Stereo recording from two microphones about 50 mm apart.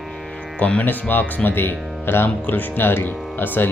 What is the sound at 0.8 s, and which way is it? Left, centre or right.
Speech, left.